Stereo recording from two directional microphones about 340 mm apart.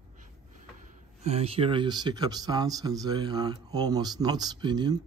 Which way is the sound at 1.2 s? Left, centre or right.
Centre.